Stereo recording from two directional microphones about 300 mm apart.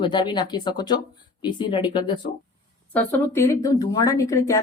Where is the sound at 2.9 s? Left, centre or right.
Centre.